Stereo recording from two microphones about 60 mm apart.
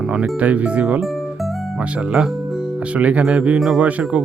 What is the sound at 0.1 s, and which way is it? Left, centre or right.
Speech, right.